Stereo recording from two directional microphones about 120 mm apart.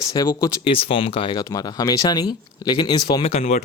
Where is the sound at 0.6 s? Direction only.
50° left (ahead or behind).